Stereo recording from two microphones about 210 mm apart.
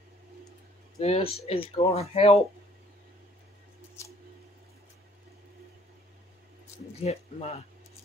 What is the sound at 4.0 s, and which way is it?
Scissors, 15° left (ahead or behind).